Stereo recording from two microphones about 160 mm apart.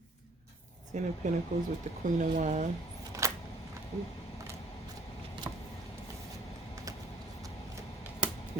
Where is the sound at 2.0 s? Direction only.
50° right (ahead or behind).